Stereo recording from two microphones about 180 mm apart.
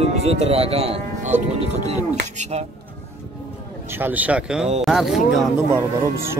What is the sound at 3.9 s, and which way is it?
Speech, 10° right (ahead or behind).